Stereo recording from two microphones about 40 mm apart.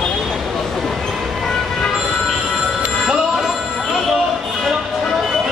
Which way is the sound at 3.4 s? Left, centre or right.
Centre.